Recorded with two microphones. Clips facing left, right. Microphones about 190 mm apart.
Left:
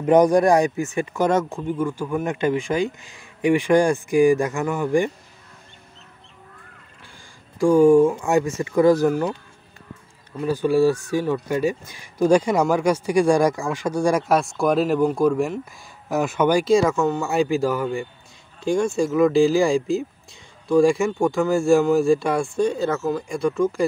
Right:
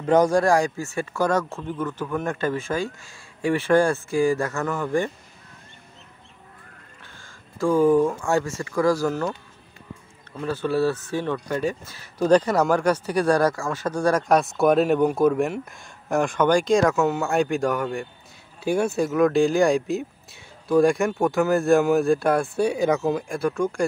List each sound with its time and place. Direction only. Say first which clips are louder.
0.0 s speech: left 3 dB; 20° left (ahead or behind)
7.2 s a sound: left 5 dB; 15° left (ahead or behind)
8.1 s speech: left 3 dB; 15° left (ahead or behind)
10.3 s speech: left 4 dB; 10° left (ahead or behind); by 23.2 s 15° right (ahead or behind)
23.2 s speech: left 3 dB; centre (ahead or behind)